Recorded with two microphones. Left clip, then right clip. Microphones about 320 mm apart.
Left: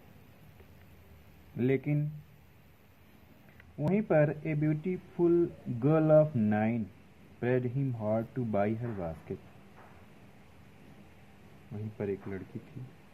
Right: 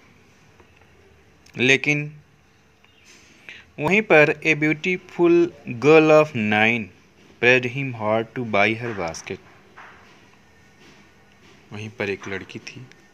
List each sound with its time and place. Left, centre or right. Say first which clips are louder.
1.6 s speech: right 14 dB; centre
3.9 s speech: right 13 dB; centre
11.7 s a man's voice: right 9 dB; centre